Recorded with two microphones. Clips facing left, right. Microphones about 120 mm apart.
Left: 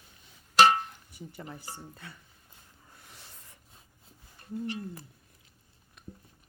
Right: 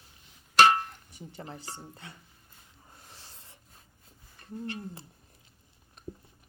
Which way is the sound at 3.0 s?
35° right (ahead or behind).